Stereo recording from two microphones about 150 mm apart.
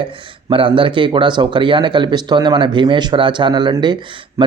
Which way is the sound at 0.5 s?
35° right (ahead or behind).